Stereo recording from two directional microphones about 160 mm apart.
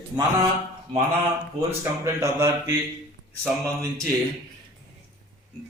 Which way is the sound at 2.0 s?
15° right (ahead or behind).